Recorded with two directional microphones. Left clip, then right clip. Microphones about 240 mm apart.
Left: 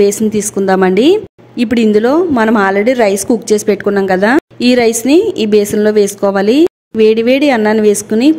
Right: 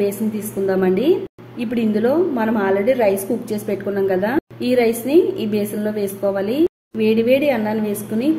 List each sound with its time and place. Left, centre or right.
0.0 s a woman's voice: left